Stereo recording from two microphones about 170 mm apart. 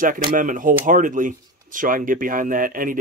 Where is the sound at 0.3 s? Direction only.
50° right (ahead or behind).